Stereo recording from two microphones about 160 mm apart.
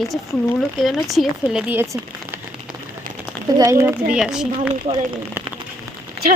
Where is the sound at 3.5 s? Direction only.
20° right (ahead or behind).